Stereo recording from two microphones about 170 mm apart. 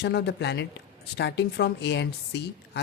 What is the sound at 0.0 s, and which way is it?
Speech, 80° left.